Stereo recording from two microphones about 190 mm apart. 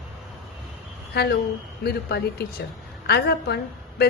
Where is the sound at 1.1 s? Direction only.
55° left (ahead or behind).